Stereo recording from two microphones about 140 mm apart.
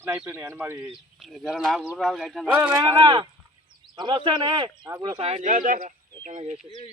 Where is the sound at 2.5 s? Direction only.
15° right (ahead or behind).